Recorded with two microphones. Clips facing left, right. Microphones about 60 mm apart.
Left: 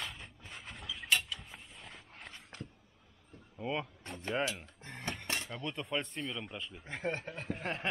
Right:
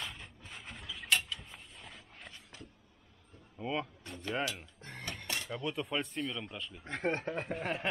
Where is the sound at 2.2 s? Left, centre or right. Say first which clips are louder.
Left 3 dB; left.